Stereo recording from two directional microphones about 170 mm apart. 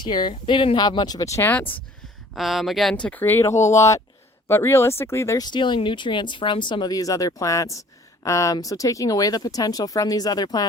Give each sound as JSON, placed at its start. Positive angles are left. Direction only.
{"t": 0.0, "sound": "speech", "side_deg": 25}
{"t": 2.3, "sound": "speech", "side_deg": 0}